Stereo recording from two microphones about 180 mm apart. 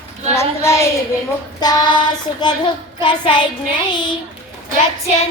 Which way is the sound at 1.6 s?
25° left (ahead or behind).